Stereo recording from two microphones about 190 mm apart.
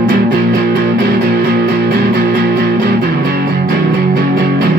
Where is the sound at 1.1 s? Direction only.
55° right (ahead or behind).